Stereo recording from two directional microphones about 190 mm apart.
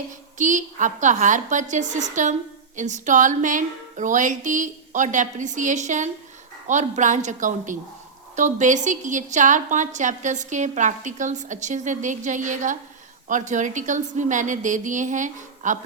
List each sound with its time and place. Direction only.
0.3 s a woman's voice: 40° right (ahead or behind)